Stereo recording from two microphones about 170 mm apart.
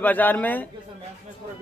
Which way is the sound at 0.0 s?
10° left (ahead or behind).